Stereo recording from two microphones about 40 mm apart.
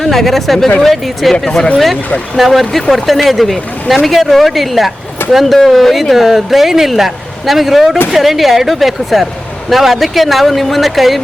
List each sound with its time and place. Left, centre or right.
0.0 s speech: centre
1.5 s speech: left
2.3 s speech: centre